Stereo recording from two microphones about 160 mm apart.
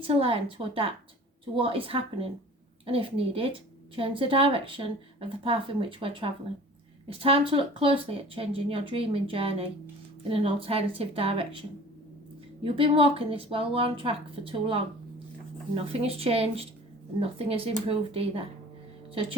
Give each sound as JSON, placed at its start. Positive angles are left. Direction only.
{"t": 0.0, "sound": "speech", "side_deg": -35}
{"t": 12.6, "sound": "speech", "side_deg": -35}